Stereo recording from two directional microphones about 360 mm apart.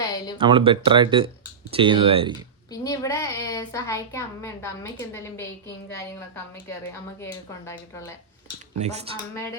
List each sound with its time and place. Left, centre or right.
0.3 s speech: centre
2.8 s a woman's voice: centre
7.2 s a woman's voice: centre
8.8 s speech: centre